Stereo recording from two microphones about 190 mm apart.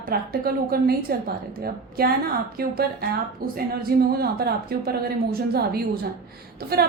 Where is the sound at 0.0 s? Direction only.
50° right (ahead or behind).